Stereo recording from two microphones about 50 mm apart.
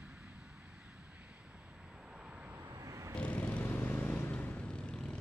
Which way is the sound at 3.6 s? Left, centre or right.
Left.